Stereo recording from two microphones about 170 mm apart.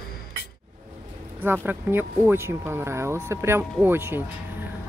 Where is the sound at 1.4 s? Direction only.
10° right (ahead or behind).